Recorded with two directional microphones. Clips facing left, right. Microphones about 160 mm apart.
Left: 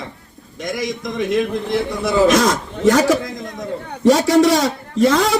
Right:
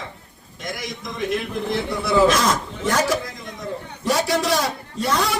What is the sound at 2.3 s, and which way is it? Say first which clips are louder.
A man's voice: left 5 dB; 90° left.